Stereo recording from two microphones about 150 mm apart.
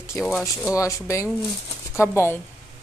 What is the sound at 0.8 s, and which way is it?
A woman's voice, 20° left (ahead or behind).